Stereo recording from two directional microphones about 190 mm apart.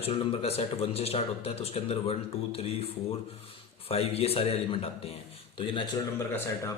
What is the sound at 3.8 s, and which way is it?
A man's voice, 30° left (ahead or behind).